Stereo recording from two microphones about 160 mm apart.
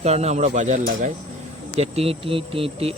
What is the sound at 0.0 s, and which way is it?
Speech, 40° right (ahead or behind).